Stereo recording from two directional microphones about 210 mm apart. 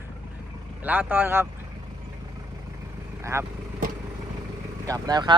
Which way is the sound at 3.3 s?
15° right (ahead or behind).